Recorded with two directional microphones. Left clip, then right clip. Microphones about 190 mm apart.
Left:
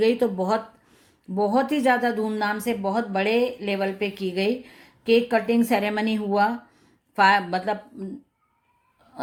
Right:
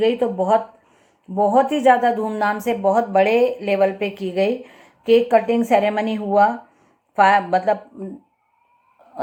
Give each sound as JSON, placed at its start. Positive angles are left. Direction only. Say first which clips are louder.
{"t": 0.0, "sound": "speech", "louder": "right 3 dB", "side_deg": 40}